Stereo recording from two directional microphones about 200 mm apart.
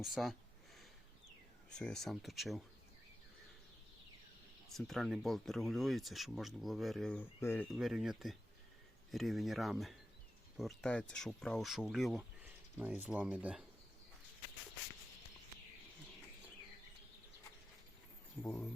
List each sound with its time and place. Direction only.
0.0 s speech: centre (ahead or behind)
1.7 s speech: 5° left (ahead or behind)
4.7 s speech: centre (ahead or behind)